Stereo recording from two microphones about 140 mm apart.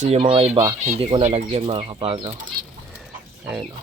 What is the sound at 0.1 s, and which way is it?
Speech, 45° right (ahead or behind).